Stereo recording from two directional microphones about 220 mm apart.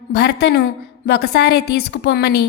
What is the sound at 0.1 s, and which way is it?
A woman's voice, 50° left (ahead or behind).